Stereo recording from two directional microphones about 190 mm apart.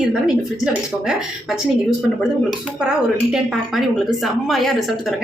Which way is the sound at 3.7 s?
Centre (ahead or behind).